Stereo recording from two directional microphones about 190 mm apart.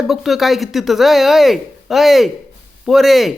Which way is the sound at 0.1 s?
Centre (ahead or behind).